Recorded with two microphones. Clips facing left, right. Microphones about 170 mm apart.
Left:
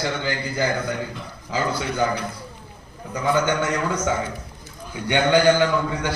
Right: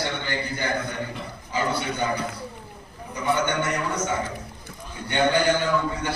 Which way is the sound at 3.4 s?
90° left.